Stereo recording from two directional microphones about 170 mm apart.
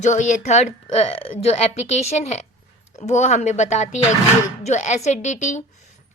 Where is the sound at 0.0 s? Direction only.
45° left (ahead or behind).